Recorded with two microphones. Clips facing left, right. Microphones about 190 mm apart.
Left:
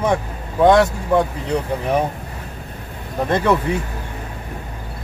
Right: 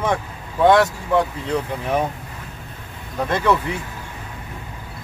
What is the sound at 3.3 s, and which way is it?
Speech, 20° left (ahead or behind).